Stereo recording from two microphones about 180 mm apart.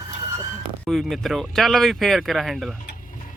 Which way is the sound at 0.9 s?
Centre (ahead or behind).